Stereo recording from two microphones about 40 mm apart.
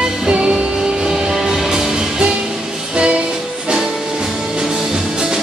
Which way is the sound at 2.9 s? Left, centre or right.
Right.